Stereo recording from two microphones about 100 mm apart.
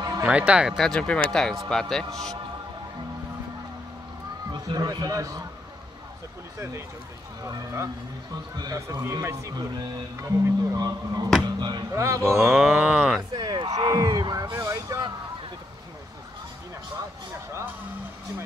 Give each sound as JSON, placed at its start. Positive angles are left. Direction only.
{"t": 0.2, "sound": "a sound", "side_deg": -15}
{"t": 0.7, "sound": "speech", "side_deg": 5}
{"t": 4.5, "sound": "speech", "side_deg": -40}
{"t": 7.4, "sound": "speech", "side_deg": -30}
{"t": 11.9, "sound": "speech", "side_deg": -30}
{"t": 12.4, "sound": "a sound", "side_deg": -5}
{"t": 13.3, "sound": "a sound", "side_deg": -40}
{"t": 13.7, "sound": "speech", "side_deg": -40}
{"t": 17.5, "sound": "vehicle", "side_deg": -25}